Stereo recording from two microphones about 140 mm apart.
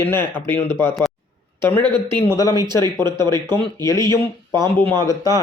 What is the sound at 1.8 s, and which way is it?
Speech, 35° right (ahead or behind).